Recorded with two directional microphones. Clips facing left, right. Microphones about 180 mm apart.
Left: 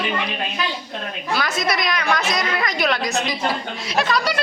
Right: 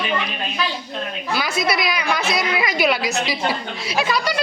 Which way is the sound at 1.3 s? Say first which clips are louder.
Even; centre (ahead or behind).